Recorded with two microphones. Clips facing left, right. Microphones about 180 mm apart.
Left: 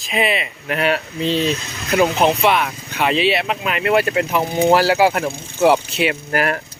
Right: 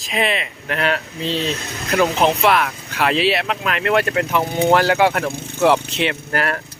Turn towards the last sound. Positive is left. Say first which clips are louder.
# left 2 dB
turn(degrees=10)  # may be behind; listen again after turning